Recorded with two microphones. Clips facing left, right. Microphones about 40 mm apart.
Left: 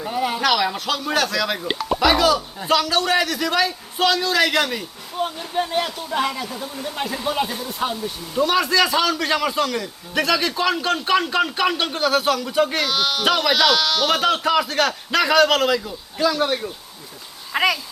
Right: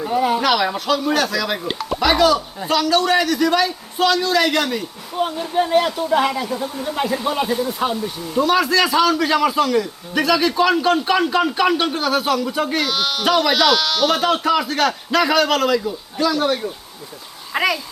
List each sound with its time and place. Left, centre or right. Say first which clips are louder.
0.0 s a child's voice: right 4 dB; centre